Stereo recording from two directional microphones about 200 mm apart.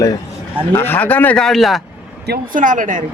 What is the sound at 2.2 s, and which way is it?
Speech, 50° right (ahead or behind).